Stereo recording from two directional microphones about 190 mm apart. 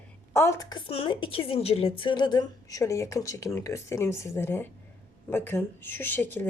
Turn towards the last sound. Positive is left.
turn(degrees=10)  # may be behind; listen again after turning